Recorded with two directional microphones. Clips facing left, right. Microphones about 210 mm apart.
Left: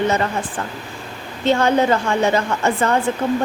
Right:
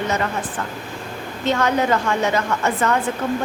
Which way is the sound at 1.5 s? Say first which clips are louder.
Left 3 dB; 30° left (ahead or behind).